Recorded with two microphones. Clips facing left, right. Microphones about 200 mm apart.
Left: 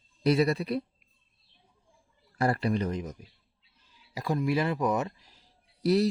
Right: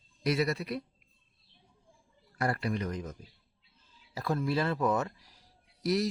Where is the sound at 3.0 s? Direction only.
15° left (ahead or behind).